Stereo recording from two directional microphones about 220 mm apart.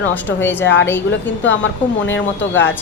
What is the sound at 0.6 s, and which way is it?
Speech, 55° left (ahead or behind).